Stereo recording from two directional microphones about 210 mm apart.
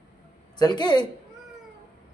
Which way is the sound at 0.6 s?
20° left (ahead or behind).